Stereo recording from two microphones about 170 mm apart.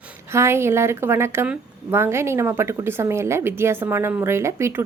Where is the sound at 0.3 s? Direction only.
15° right (ahead or behind).